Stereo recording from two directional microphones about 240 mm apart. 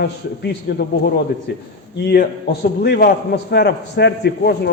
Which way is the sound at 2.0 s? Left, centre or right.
Left.